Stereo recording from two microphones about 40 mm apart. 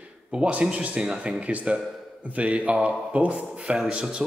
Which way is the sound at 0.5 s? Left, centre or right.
Right.